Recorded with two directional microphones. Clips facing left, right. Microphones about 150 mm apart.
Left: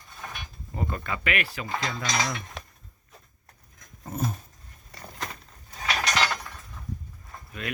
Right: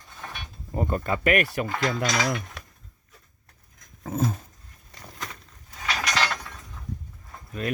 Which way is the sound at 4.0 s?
90° right.